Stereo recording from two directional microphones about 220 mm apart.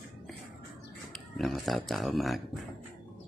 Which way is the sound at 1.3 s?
Centre (ahead or behind).